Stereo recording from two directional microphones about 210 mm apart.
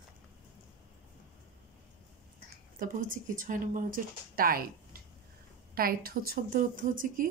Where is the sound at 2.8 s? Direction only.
40° right (ahead or behind).